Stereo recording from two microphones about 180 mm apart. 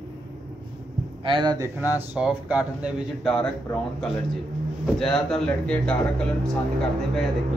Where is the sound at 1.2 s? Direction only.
25° right (ahead or behind).